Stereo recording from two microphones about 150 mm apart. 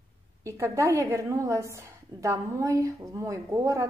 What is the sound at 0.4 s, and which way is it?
A woman's voice, 20° right (ahead or behind).